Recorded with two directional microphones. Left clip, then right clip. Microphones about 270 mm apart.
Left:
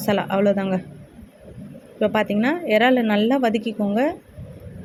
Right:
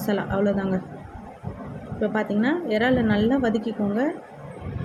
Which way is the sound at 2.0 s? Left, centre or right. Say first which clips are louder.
Left 4 dB; left.